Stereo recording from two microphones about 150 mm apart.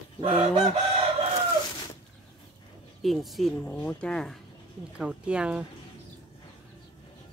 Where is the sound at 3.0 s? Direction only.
Centre (ahead or behind).